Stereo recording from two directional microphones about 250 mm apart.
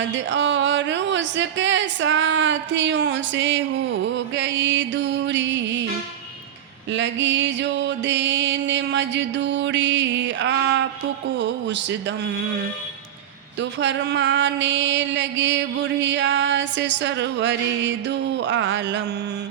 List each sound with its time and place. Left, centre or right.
0.1 s music: right
6.9 s music: right
13.6 s music: right